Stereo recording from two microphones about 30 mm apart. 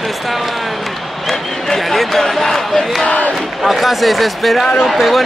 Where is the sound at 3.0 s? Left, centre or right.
Left.